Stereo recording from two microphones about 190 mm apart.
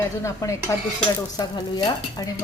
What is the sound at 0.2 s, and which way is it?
A woman's voice, 15° left (ahead or behind).